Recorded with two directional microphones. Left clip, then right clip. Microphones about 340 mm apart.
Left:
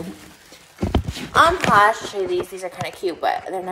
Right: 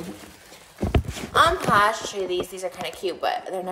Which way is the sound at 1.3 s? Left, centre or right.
Centre.